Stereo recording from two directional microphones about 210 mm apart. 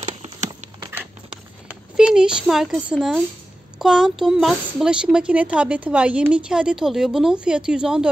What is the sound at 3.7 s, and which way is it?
Speech, 5° right (ahead or behind).